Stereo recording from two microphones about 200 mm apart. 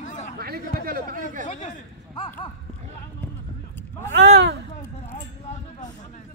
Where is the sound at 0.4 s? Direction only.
50° right (ahead or behind).